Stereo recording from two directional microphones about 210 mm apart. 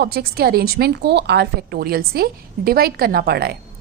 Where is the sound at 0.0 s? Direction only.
50° right (ahead or behind).